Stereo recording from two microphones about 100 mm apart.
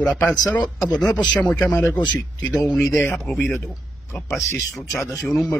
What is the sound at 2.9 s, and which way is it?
A man's voice, 25° left (ahead or behind).